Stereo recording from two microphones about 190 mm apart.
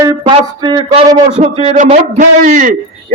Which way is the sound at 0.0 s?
20° right (ahead or behind).